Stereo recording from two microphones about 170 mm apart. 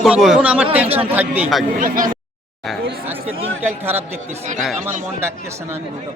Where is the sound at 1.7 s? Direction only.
55° right (ahead or behind).